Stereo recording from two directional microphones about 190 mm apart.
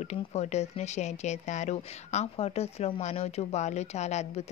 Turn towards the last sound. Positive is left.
turn(degrees=35)  # may be behind; listen again after turning